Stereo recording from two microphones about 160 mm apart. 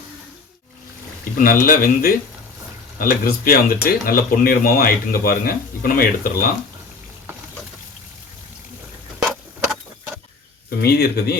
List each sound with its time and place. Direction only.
1.2 s a man's voice: 65° left (ahead or behind)
10.8 s speech: 75° left (ahead or behind)